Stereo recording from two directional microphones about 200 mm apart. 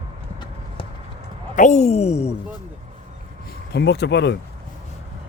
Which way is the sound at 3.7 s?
55° left (ahead or behind).